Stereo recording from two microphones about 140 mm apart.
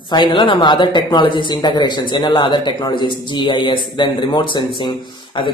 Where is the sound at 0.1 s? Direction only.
35° left (ahead or behind).